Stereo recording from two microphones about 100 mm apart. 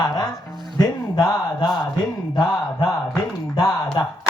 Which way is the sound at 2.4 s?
40° left (ahead or behind).